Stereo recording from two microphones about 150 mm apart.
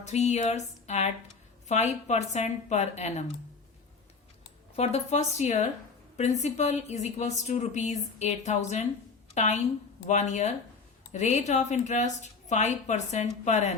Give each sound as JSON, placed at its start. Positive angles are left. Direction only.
{"t": 0.0, "sound": "speech", "side_deg": 50}
{"t": 4.8, "sound": "a woman's voice", "side_deg": 45}